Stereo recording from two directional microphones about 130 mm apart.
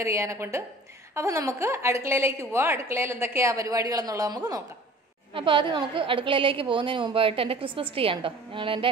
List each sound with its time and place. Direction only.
0.0 s a woman's voice: 20° right (ahead or behind)
5.3 s a woman's voice: 40° right (ahead or behind)